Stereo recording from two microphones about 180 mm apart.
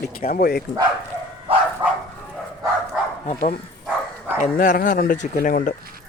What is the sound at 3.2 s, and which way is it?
Speech, 40° left (ahead or behind).